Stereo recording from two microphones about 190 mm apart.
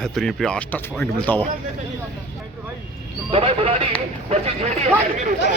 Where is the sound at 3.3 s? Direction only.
30° right (ahead or behind).